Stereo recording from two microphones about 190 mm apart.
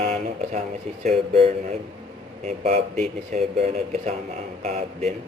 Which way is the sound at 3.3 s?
35° right (ahead or behind).